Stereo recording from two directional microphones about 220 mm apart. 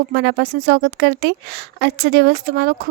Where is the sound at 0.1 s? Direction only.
50° right (ahead or behind).